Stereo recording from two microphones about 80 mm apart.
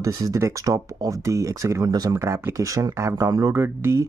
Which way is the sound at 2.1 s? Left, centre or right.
Right.